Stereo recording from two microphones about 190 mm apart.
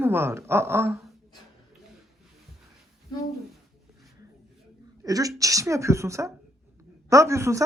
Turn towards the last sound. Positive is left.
turn(degrees=-15)  # may be behind; listen again after turning